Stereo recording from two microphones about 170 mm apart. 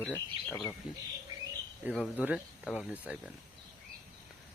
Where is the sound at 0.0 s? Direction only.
10° left (ahead or behind).